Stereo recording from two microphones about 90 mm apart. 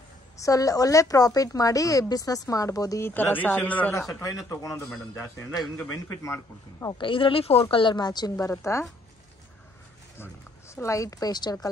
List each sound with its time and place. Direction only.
0.4 s speech: 40° left (ahead or behind)
3.0 s speech: 20° left (ahead or behind)
4.2 s speech: 35° left (ahead or behind)
7.0 s speech: 70° left (ahead or behind)
7.7 s a woman's voice: 60° left (ahead or behind)
8.5 s speech: 35° left (ahead or behind)
10.1 s speech: 30° left (ahead or behind); by 11.5 s 50° left (ahead or behind)